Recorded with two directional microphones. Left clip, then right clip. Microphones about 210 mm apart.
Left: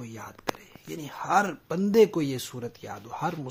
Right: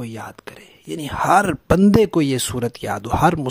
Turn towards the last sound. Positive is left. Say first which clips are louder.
# right 15 dB
turn(degrees=-55)  # may be behind; listen again after turning